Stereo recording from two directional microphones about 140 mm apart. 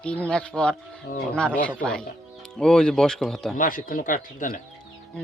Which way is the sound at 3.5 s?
75° left (ahead or behind).